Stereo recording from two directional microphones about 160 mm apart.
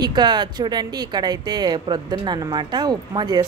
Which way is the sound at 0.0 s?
25° right (ahead or behind).